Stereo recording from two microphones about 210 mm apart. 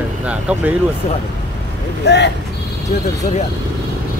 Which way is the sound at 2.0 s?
55° left (ahead or behind).